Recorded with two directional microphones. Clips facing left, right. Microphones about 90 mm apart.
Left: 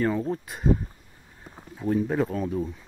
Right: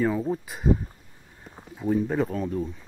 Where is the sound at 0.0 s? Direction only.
5° right (ahead or behind).